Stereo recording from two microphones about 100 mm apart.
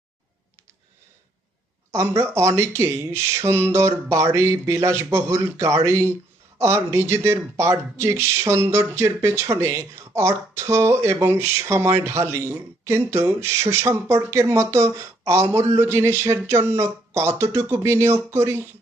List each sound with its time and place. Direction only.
1.9 s speech: 25° right (ahead or behind)